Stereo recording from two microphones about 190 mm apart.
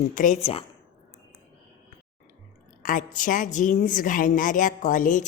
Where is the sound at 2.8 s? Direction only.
45° left (ahead or behind).